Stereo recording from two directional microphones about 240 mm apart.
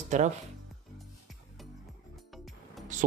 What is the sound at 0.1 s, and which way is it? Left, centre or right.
Speech, right.